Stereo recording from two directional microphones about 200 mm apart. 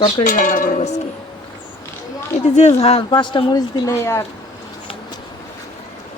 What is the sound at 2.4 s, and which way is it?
A woman's voice, 35° left (ahead or behind).